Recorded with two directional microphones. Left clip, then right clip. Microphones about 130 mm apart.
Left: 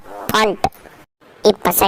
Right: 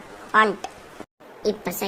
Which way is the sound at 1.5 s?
60° left (ahead or behind).